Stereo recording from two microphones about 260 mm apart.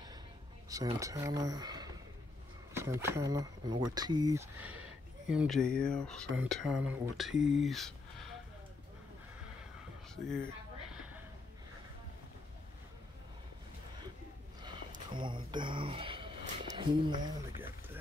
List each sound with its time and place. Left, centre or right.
0.7 s speech: centre
10.1 s speech: centre
14.6 s a sound: centre